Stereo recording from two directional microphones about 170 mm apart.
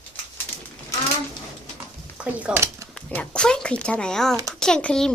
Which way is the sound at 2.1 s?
10° right (ahead or behind).